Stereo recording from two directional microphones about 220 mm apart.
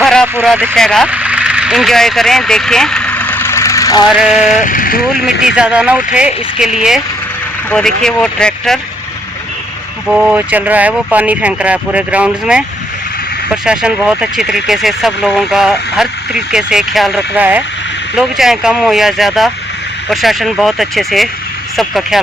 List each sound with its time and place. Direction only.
0.0 s a sound: 5° left (ahead or behind)
0.4 s speech: 5° right (ahead or behind)
0.9 s vehicle: centre (ahead or behind); by 4.0 s 15° left (ahead or behind)
4.5 s speech: 35° left (ahead or behind)
5.2 s speech: 5° right (ahead or behind)
10.1 s speech: 5° right (ahead or behind)
13.7 s speech: 5° right (ahead or behind)